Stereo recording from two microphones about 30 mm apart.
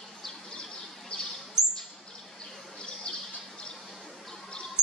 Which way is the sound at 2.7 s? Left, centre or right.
Left.